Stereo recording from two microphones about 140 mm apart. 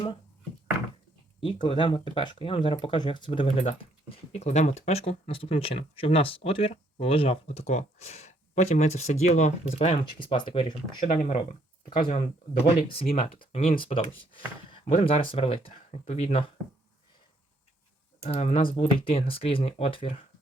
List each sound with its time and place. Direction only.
1.4 s speech: 40° left (ahead or behind)
10.0 s speech: 35° left (ahead or behind)
11.0 s speech: 60° left (ahead or behind)
18.2 s speech: 50° left (ahead or behind)